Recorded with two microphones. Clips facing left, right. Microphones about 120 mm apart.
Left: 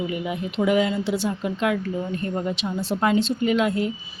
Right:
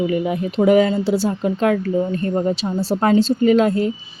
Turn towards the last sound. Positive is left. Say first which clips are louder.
# right 6 dB
turn(degrees=-40)  # may be behind; listen again after turning